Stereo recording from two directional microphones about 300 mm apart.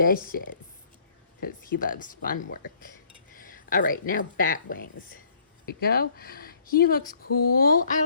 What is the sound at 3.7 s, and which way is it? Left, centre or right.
Speech, left.